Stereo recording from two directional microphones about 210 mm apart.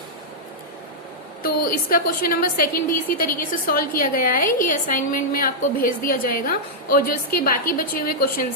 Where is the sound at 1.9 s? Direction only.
45° left (ahead or behind).